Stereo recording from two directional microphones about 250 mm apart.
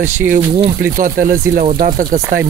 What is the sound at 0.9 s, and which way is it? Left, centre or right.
Speech, right.